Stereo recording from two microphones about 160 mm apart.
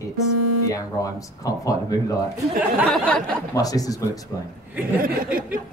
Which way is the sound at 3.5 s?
20° left (ahead or behind).